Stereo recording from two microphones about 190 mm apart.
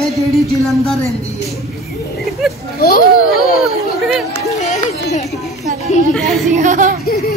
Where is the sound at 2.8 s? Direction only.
50° left (ahead or behind).